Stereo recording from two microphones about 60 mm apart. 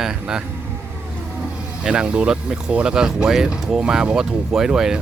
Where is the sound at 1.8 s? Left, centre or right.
Centre.